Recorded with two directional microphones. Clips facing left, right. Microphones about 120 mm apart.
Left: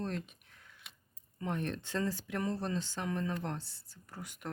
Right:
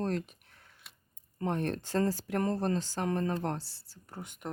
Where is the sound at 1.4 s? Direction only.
40° right (ahead or behind).